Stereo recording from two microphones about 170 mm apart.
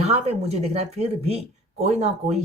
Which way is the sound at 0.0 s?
40° right (ahead or behind).